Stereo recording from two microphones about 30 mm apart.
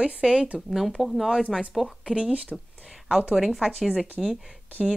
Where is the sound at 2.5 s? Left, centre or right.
Centre.